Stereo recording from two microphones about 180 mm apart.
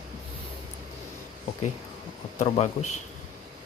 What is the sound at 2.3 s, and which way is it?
Speech, 35° left (ahead or behind).